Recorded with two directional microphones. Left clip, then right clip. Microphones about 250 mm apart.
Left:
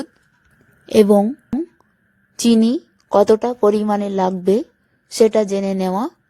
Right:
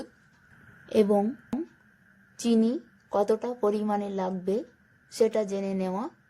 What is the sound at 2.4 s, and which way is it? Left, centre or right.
A woman's voice, left.